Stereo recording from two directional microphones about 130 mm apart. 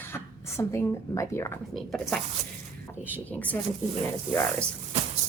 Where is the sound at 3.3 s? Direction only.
10° left (ahead or behind).